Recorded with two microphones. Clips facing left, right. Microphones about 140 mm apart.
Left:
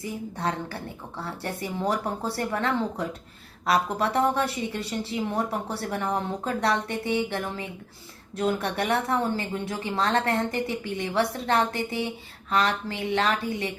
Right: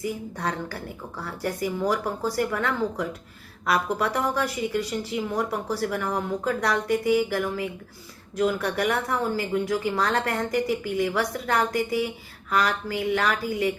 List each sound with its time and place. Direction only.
0.0 s speech: 30° left (ahead or behind)